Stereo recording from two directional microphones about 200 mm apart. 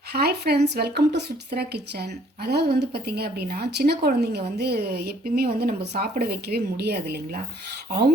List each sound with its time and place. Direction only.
0.1 s speech: 55° right (ahead or behind)